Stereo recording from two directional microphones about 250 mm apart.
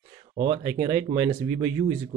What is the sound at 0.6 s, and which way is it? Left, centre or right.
Speech, centre.